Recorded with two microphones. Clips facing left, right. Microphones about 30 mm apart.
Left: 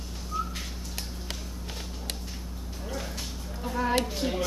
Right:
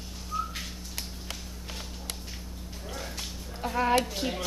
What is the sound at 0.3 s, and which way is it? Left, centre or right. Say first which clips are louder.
Whistling: even; centre.